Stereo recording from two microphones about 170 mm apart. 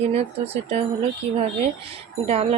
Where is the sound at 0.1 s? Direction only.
40° right (ahead or behind).